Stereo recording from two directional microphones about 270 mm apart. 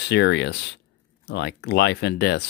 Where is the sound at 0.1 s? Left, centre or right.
Left.